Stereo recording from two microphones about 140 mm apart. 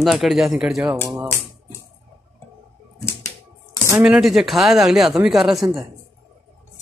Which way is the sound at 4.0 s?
5° right (ahead or behind).